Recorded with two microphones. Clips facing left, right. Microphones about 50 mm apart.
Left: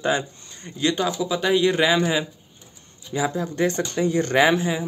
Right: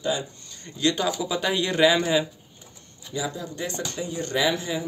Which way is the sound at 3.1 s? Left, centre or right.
Left.